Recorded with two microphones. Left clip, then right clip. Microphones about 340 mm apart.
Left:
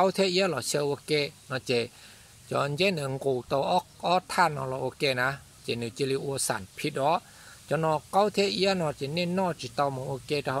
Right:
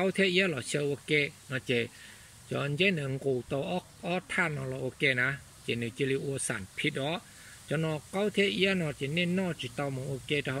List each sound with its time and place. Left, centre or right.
0.0 s speech: left